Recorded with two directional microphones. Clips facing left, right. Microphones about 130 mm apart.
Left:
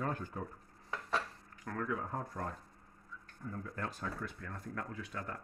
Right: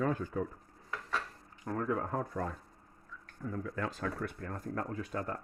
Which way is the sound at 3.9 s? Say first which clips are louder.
Right 5 dB; 75° right (ahead or behind).